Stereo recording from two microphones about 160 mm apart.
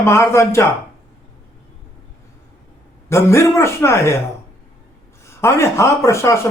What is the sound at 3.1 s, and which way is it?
Speech, 20° left (ahead or behind).